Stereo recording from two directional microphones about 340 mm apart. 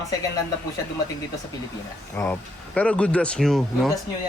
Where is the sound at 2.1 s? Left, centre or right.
Centre.